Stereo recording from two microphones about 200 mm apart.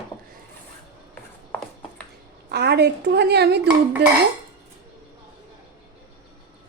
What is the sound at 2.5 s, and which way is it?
Speech, 55° right (ahead or behind).